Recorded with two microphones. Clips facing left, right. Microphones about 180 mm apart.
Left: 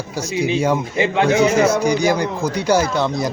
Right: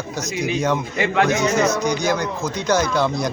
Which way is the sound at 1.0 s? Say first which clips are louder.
Left 4 dB; 25° left (ahead or behind).